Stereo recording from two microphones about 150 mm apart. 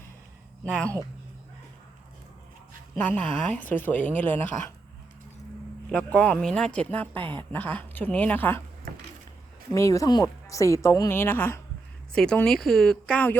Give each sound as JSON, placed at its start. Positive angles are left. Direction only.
{"t": 0.6, "sound": "speech", "side_deg": 5}
{"t": 2.9, "sound": "speech", "side_deg": 10}
{"t": 5.9, "sound": "speech", "side_deg": 5}
{"t": 7.1, "sound": "speech", "side_deg": -35}
{"t": 7.5, "sound": "speech", "side_deg": 10}
{"t": 9.7, "sound": "speech", "side_deg": 20}